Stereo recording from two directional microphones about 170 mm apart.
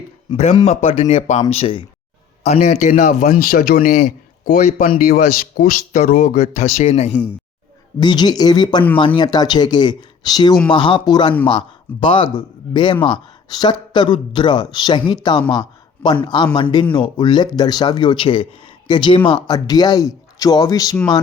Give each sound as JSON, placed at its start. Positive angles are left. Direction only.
{"t": 0.3, "sound": "speech", "side_deg": 25}
{"t": 0.6, "sound": "speech", "side_deg": 40}
{"t": 2.4, "sound": "a man's voice", "side_deg": 40}
{"t": 3.8, "sound": "a man's voice", "side_deg": 45}
{"t": 7.9, "sound": "speech", "side_deg": 25}